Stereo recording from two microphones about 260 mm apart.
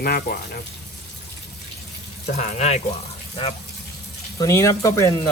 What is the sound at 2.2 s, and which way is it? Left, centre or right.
Speech, left.